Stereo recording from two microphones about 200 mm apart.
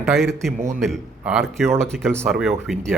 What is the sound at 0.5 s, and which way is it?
Speech, 40° right (ahead or behind).